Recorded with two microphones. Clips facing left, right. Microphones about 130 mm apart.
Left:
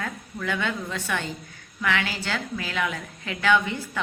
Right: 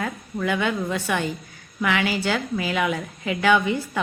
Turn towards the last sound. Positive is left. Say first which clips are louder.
# right 3 dB
turn(degrees=-10)  # may be behind; listen again after turning